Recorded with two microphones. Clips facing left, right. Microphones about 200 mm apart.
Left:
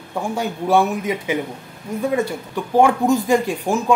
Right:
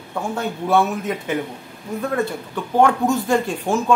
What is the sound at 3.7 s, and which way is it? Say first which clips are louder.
Speech: even; 15° left (ahead or behind).